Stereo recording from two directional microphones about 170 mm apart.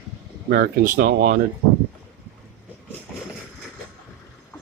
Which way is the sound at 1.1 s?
70° right (ahead or behind).